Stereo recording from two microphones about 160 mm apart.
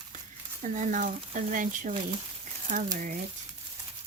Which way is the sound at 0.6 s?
50° right (ahead or behind).